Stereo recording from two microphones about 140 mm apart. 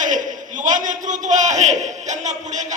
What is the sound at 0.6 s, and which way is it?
A man's voice, 65° right (ahead or behind).